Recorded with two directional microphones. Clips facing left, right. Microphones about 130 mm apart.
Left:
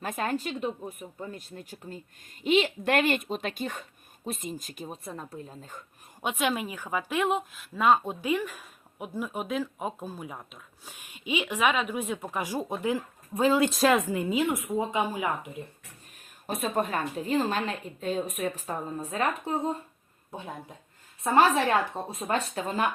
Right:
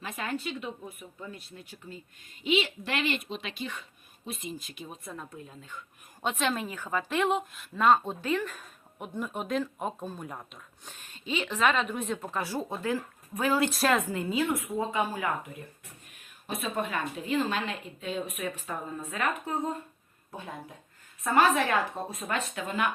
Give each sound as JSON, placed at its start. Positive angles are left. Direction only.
{"t": 0.0, "sound": "a woman's voice", "side_deg": 45}
{"t": 6.2, "sound": "a woman's voice", "side_deg": 10}
{"t": 7.2, "sound": "a woman's voice", "side_deg": 0}
{"t": 16.1, "sound": "a woman's voice", "side_deg": 40}
{"t": 21.2, "sound": "a woman's voice", "side_deg": 30}